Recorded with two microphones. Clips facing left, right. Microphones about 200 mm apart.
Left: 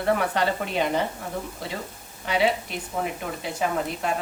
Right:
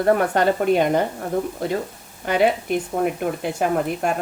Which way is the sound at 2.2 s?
50° right (ahead or behind).